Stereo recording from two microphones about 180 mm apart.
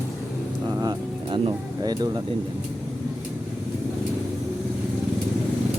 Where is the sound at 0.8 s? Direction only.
25° right (ahead or behind).